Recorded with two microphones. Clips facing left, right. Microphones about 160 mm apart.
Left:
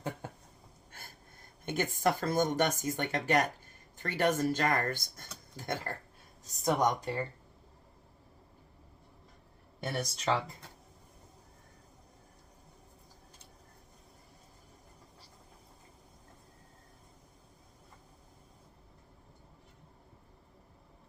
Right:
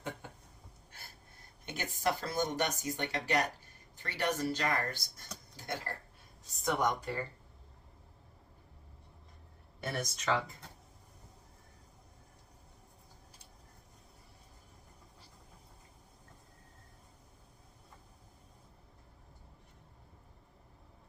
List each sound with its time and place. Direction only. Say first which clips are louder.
1.6 s speech: left 4 dB; 50° left (ahead or behind)
6.4 s speech: left 3 dB; 40° left (ahead or behind)
9.8 s speech: left 2 dB; 30° left (ahead or behind)